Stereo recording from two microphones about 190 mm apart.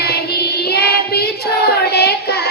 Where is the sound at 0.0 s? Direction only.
60° left (ahead or behind).